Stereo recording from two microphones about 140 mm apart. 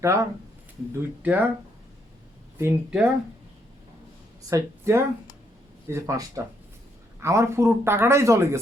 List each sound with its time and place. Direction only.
0.0 s speech: 20° right (ahead or behind)
2.6 s speech: 15° right (ahead or behind)
4.4 s speech: 20° right (ahead or behind)